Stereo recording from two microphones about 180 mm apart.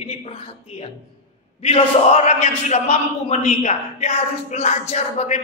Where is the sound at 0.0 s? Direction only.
35° left (ahead or behind).